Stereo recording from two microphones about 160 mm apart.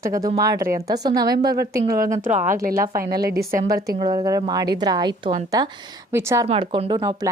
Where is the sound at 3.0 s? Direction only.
75° right (ahead or behind).